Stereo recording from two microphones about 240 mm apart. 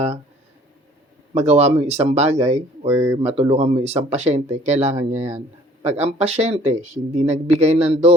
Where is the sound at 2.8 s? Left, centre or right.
Centre.